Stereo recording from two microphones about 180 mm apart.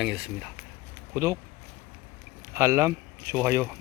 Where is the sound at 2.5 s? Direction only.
15° right (ahead or behind).